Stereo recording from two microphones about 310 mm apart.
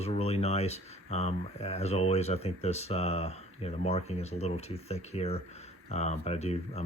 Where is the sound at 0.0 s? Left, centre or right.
Centre.